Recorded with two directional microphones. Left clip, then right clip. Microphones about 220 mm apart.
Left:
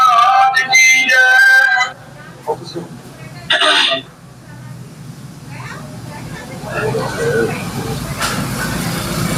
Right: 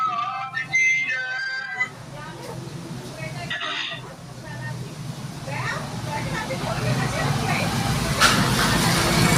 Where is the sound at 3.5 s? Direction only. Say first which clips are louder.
Left 17 dB; 45° left (ahead or behind).